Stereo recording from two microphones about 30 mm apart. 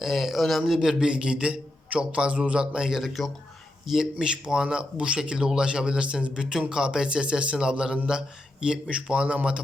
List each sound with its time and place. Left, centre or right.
0.0 s a man's voice: centre
0.8 s a man's voice: right
3.1 s a man's voice: centre
4.0 s a man's voice: right
9.2 s speech: right